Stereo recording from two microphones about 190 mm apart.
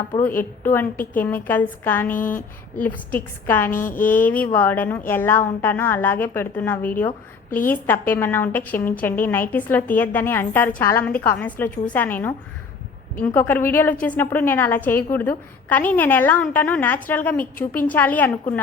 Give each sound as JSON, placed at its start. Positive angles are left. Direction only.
{"t": 0.2, "sound": "a woman's voice", "side_deg": 10}
{"t": 3.7, "sound": "a woman's voice", "side_deg": 45}
{"t": 4.0, "sound": "a woman's voice", "side_deg": 10}